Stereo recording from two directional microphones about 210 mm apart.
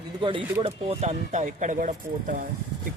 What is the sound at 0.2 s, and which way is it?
Speech, 25° right (ahead or behind).